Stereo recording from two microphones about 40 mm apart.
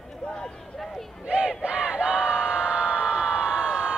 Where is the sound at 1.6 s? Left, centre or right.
Right.